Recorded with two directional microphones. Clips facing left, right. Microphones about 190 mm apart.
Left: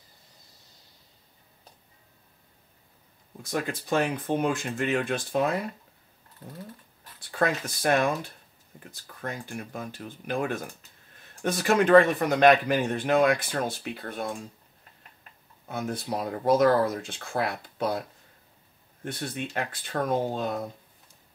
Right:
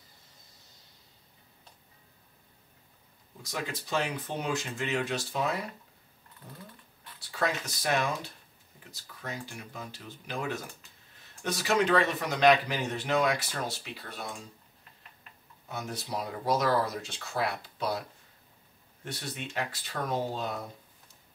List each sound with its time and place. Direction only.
3.4 s speech: 50° left (ahead or behind)
7.2 s speech: 55° left (ahead or behind)
15.7 s speech: 55° left (ahead or behind)
19.0 s speech: 50° left (ahead or behind)